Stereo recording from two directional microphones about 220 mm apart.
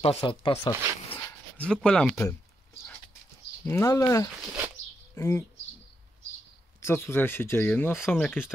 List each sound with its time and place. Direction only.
0.0 s speech: 25° left (ahead or behind)
1.1 s a sound: 5° left (ahead or behind)
3.6 s speech: 15° left (ahead or behind)
6.8 s speech: 10° left (ahead or behind)